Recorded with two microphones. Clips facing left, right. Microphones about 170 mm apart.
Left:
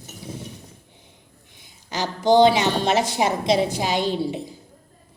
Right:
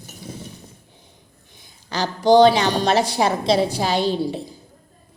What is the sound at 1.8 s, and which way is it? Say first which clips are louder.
A woman's voice: right 3 dB; 15° left (ahead or behind).